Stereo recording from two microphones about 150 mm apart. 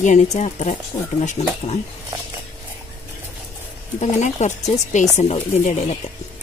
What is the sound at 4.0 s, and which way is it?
Speech, 50° left (ahead or behind).